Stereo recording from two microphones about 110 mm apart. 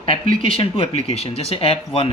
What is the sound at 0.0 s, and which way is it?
Speech, 55° left (ahead or behind).